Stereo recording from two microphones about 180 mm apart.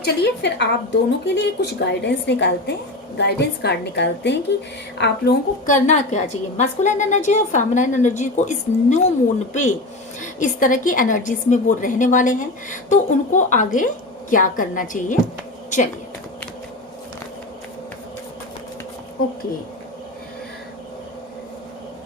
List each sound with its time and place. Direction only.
0.0 s a woman's voice: 70° left (ahead or behind)
5.6 s a woman's voice: 45° left (ahead or behind)